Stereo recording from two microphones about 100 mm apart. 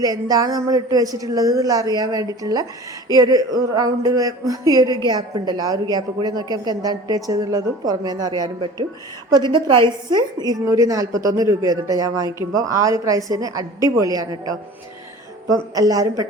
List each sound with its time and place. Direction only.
0.0 s a woman's voice: 40° right (ahead or behind)